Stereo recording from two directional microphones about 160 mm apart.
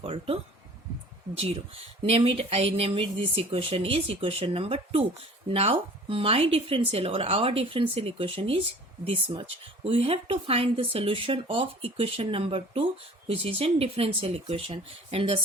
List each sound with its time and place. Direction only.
0.0 s speech: 35° right (ahead or behind)
1.4 s speech: 40° right (ahead or behind)